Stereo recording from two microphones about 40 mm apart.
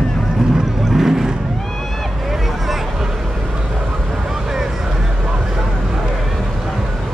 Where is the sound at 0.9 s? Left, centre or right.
Centre.